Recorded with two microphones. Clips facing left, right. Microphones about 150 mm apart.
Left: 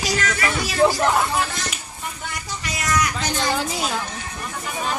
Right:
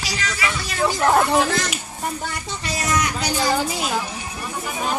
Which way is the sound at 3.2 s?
10° right (ahead or behind).